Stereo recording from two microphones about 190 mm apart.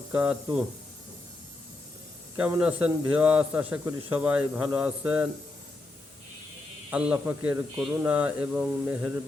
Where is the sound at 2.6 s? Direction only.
5° right (ahead or behind).